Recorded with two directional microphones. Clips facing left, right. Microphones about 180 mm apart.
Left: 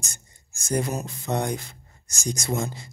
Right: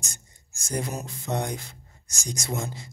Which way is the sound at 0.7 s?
50° left (ahead or behind).